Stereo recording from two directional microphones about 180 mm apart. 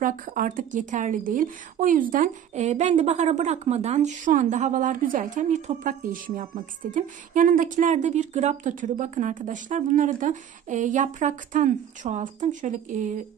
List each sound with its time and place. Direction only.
0.0 s speech: 50° right (ahead or behind)